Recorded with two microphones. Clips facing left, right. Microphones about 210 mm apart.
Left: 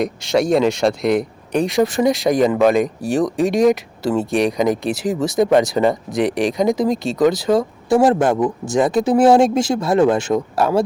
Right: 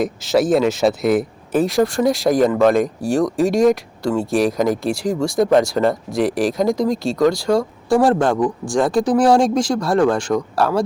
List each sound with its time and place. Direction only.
0.0 s speech: centre (ahead or behind)
2.5 s speech: 15° left (ahead or behind)
2.8 s speech: centre (ahead or behind)
8.2 s speech: 20° left (ahead or behind)